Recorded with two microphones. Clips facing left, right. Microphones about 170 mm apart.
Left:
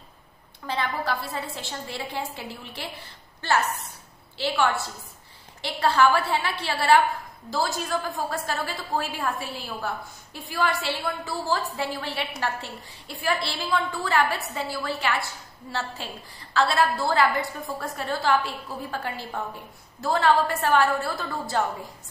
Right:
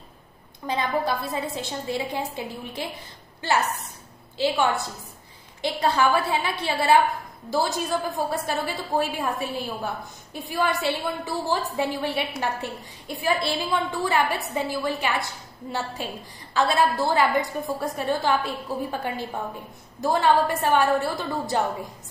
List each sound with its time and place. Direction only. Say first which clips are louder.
0.7 s a woman's voice: right 3 dB; 15° right (ahead or behind)
16.5 s a woman's voice: right 1 dB; 15° right (ahead or behind)